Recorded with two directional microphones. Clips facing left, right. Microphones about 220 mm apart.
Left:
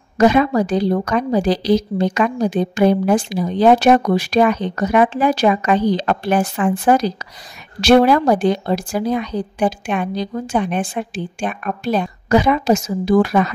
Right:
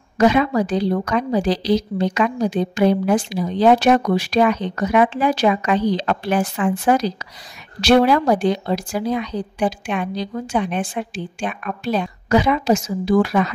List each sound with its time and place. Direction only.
0.2 s a woman's voice: 45° left (ahead or behind)